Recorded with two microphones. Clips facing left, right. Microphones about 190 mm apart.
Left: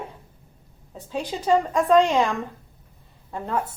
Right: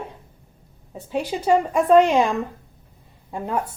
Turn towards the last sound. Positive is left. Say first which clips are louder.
# right 2 dB
turn(degrees=-15)  # may be behind; listen again after turning